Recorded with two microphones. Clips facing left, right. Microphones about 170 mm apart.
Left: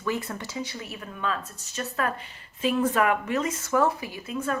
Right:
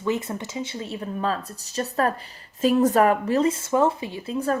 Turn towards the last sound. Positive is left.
turn(degrees=-35)  # may be behind; listen again after turning